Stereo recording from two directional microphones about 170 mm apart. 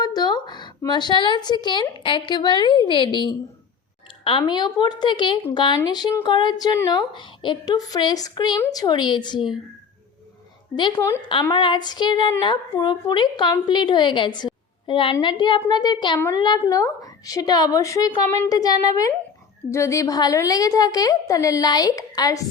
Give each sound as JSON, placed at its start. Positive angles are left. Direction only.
{"t": 0.0, "sound": "a woman's voice", "side_deg": 25}
{"t": 10.9, "sound": "a woman's voice", "side_deg": 15}
{"t": 11.4, "sound": "a woman's voice", "side_deg": 25}